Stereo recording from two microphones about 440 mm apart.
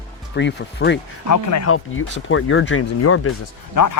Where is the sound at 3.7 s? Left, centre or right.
Left.